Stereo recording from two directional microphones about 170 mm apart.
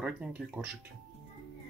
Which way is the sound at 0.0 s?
5° right (ahead or behind).